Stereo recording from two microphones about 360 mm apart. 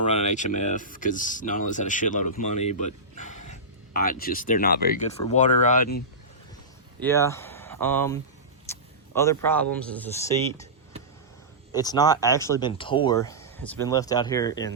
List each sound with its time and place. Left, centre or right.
0.1 s speech: centre
7.0 s speech: centre
11.7 s speech: centre